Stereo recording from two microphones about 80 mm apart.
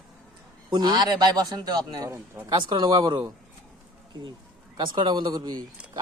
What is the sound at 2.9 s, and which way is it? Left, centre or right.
Speech, right.